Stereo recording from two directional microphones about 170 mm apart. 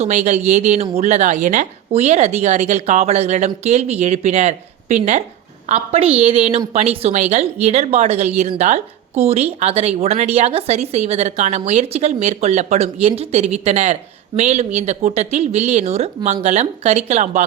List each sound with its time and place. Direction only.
0.0 s a woman's voice: 45° right (ahead or behind)